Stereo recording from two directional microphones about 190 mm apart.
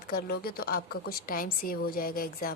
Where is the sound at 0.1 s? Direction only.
55° left (ahead or behind).